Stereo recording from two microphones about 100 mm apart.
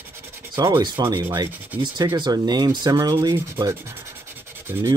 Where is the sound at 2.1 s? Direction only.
45° right (ahead or behind).